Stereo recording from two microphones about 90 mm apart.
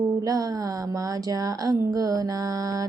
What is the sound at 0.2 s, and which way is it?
Speech, 40° right (ahead or behind).